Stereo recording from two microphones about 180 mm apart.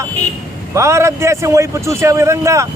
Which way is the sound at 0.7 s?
15° right (ahead or behind).